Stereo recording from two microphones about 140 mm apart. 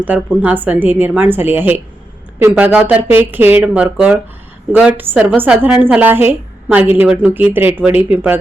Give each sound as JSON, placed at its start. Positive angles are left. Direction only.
{"t": 0.1, "sound": "a woman's voice", "side_deg": -10}